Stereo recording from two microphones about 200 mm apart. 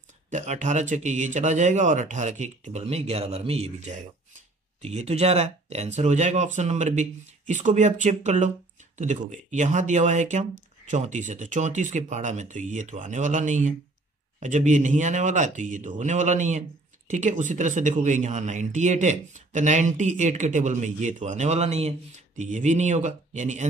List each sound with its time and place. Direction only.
0.3 s speech: 35° right (ahead or behind)